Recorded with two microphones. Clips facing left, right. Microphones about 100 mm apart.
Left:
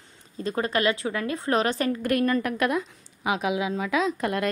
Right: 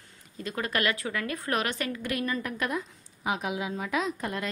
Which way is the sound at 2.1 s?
55° left (ahead or behind).